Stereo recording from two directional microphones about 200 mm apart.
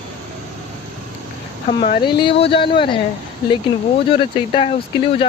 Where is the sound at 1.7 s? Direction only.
35° left (ahead or behind).